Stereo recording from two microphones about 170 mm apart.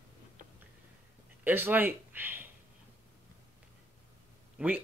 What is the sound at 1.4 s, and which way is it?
Speech, 10° right (ahead or behind).